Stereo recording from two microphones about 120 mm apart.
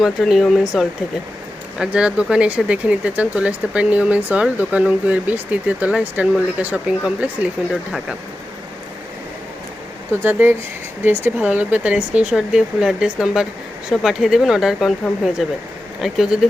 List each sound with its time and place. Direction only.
0.0 s speech: centre (ahead or behind)
10.1 s speech: 15° right (ahead or behind)